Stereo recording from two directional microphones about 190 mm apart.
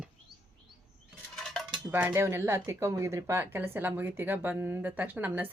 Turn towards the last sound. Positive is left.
turn(degrees=-10)  # may be behind; listen again after turning